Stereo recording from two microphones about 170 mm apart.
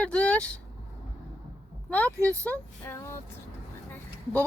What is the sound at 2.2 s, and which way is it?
Speech, 10° left (ahead or behind).